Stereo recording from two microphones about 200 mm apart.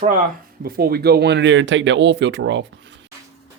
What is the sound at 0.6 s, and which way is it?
Speech, 50° right (ahead or behind).